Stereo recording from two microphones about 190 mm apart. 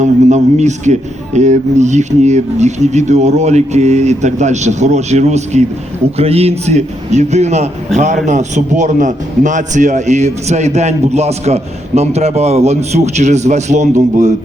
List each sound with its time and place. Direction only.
0.0 s a man's voice: 40° right (ahead or behind)